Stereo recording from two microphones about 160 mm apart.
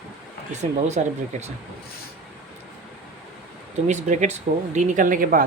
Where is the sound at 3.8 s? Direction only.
50° right (ahead or behind).